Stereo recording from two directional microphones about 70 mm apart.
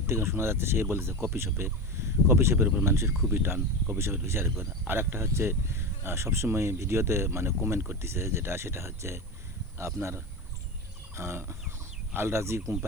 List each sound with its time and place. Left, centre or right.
0.1 s speech: right
11.1 s fowl: right
12.1 s speech: right